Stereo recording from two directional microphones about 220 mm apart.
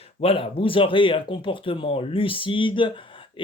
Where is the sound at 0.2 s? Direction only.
25° left (ahead or behind).